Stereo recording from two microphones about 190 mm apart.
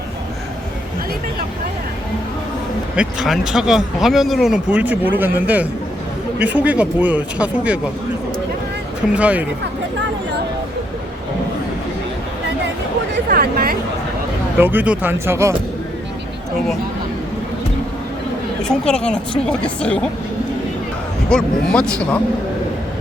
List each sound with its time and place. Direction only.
2.9 s speech: 5° right (ahead or behind)
9.1 s speech: 5° right (ahead or behind)
13.3 s speech: 50° right (ahead or behind)
14.6 s speech: 10° right (ahead or behind)
18.7 s speech: 5° left (ahead or behind)
21.2 s speech: 5° left (ahead or behind)